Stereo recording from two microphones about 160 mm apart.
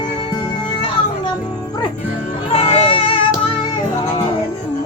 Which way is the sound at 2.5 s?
40° left (ahead or behind).